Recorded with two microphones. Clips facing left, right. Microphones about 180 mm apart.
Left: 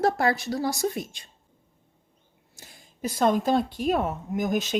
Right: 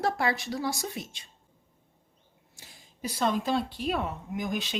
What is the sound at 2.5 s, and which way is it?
Speech, 50° left (ahead or behind).